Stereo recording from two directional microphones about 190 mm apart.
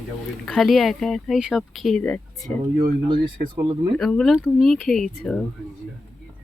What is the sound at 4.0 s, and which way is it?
Speech, centre (ahead or behind).